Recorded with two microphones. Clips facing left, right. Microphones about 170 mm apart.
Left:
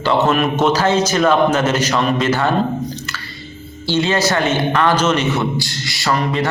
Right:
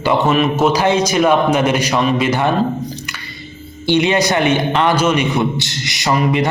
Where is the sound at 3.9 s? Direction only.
15° right (ahead or behind).